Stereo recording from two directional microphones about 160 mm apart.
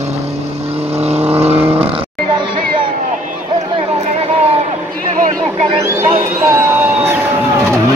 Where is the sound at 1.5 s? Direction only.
15° right (ahead or behind).